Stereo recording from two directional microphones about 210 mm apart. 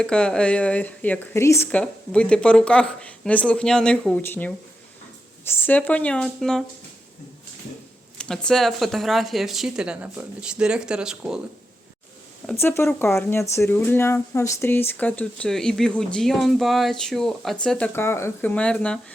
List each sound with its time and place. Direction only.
0.0 s speech: 5° left (ahead or behind)
8.2 s speech: 5° left (ahead or behind)
12.5 s speech: 10° left (ahead or behind)